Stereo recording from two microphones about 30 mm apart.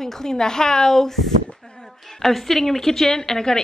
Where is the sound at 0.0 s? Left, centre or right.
Centre.